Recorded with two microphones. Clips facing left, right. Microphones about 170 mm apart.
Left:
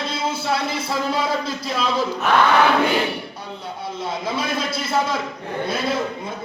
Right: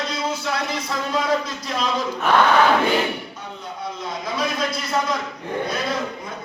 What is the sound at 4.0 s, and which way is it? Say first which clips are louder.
A man's voice: left 1 dB; 30° left (ahead or behind).